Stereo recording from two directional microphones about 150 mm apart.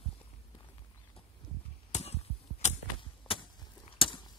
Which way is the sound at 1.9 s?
45° left (ahead or behind).